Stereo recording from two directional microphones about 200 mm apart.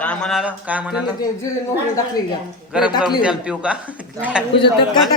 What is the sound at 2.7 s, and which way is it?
A man's voice, 5° right (ahead or behind).